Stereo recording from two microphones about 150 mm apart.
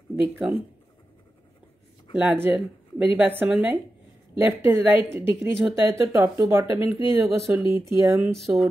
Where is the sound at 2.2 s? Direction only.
10° right (ahead or behind).